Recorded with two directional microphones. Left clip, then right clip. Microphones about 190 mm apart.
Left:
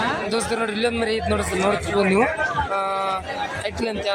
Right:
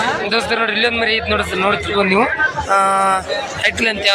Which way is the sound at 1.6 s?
10° left (ahead or behind).